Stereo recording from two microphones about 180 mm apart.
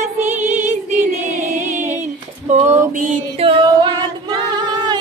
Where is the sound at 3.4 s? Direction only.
30° right (ahead or behind).